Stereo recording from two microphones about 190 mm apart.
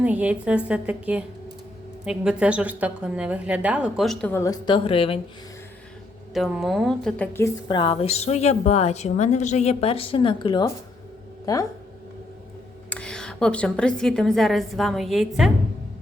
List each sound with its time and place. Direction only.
0.0 s a woman's voice: 5° right (ahead or behind); by 5.2 s 30° left (ahead or behind)
6.3 s a woman's voice: centre (ahead or behind)
7.3 s a woman's voice: 20° left (ahead or behind)
12.9 s a woman's voice: 5° left (ahead or behind)